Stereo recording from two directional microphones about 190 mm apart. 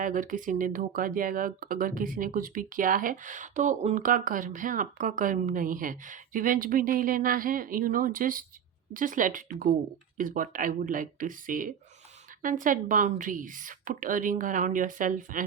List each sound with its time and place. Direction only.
0.0 s speech: 45° right (ahead or behind)